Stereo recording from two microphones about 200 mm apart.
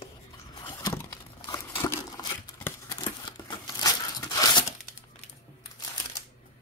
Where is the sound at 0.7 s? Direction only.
15° left (ahead or behind).